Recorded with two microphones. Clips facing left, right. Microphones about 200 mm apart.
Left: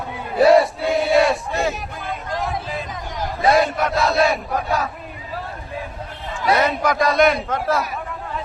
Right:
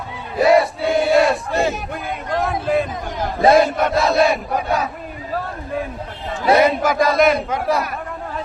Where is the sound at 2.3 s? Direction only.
55° right (ahead or behind).